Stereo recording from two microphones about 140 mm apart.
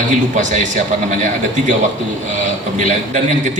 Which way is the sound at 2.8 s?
60° right (ahead or behind).